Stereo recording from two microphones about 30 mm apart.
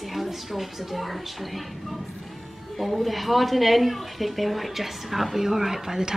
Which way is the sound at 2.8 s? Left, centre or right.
Centre.